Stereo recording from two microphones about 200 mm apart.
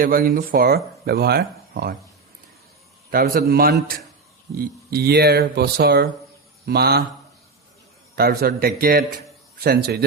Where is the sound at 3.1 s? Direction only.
50° right (ahead or behind).